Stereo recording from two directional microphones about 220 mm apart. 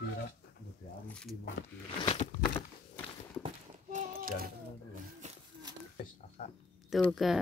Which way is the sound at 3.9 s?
35° right (ahead or behind).